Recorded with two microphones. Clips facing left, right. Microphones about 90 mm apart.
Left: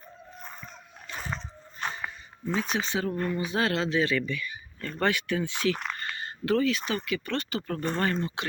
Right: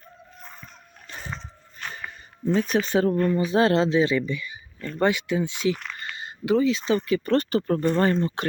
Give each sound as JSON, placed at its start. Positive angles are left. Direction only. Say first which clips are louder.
{"t": 2.4, "sound": "speech", "louder": "right 7 dB", "side_deg": -45}
{"t": 3.3, "sound": "speech", "louder": "right 7 dB", "side_deg": -30}